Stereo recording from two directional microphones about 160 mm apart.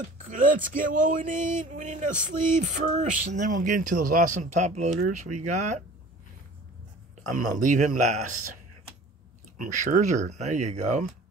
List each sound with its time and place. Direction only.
0.3 s speech: 55° right (ahead or behind)
7.2 s speech: 50° right (ahead or behind)
9.6 s speech: 50° right (ahead or behind)